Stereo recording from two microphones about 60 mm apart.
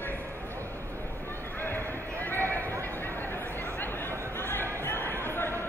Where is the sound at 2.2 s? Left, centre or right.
Left.